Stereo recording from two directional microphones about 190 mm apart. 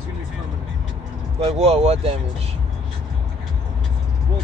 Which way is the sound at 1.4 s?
30° right (ahead or behind).